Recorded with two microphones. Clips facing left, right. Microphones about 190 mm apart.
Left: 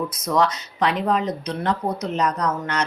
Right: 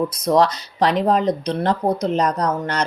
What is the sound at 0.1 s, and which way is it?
Speech, 35° right (ahead or behind).